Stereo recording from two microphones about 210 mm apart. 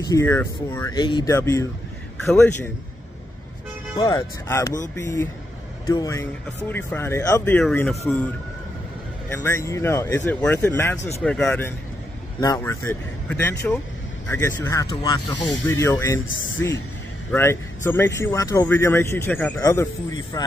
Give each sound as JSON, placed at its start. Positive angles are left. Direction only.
{"t": 0.0, "sound": "a man's voice", "side_deg": 15}
{"t": 3.9, "sound": "a man's voice", "side_deg": 15}
{"t": 9.3, "sound": "a man's voice", "side_deg": 10}
{"t": 17.3, "sound": "a man's voice", "side_deg": 10}